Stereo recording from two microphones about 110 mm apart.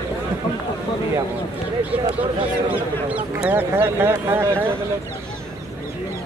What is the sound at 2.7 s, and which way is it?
Speech, 15° right (ahead or behind).